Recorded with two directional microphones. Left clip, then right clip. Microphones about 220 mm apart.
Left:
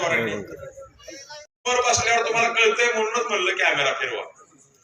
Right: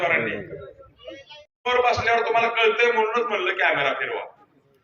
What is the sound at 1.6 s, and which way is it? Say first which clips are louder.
A man's voice: even; 20° right (ahead or behind).